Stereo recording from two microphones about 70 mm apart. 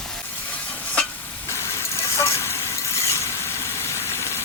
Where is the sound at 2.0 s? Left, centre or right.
Left.